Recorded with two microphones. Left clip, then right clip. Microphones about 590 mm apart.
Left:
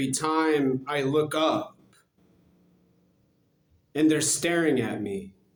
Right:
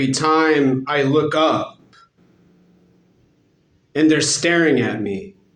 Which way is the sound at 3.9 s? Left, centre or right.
Left.